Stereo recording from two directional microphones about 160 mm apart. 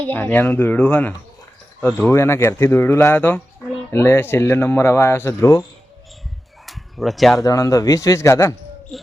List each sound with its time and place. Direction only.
0.1 s speech: 10° left (ahead or behind)
6.7 s a sound: centre (ahead or behind)
7.4 s a man's voice: 20° left (ahead or behind)
8.9 s cricket: centre (ahead or behind)